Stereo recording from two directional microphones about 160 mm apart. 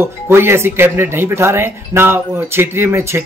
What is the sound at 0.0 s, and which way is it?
Speech, 15° right (ahead or behind).